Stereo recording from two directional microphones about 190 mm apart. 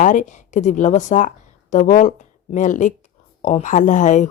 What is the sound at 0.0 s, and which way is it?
Speech, 40° left (ahead or behind).